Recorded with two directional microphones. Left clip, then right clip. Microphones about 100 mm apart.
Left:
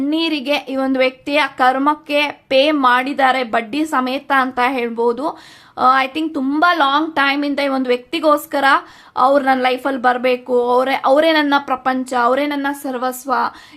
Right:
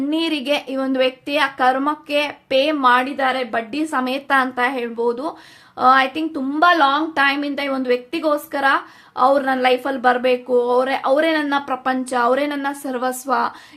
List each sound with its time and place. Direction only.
0.1 s a woman's voice: 10° left (ahead or behind); by 3.7 s 45° left (ahead or behind)
3.7 s a woman's voice: 30° left (ahead or behind)
4.5 s speech: 35° left (ahead or behind)
5.7 s a woman's voice: 25° left (ahead or behind)
6.5 s speech: 40° left (ahead or behind)
7.1 s a woman's voice: 25° left (ahead or behind); by 13.5 s 5° left (ahead or behind)